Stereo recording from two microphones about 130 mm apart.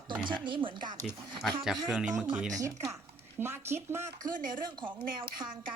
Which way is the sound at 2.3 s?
5° right (ahead or behind).